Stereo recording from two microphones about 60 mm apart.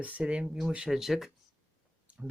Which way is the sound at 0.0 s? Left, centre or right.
Centre.